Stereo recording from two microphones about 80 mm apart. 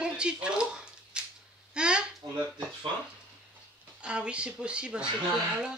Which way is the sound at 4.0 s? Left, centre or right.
Centre.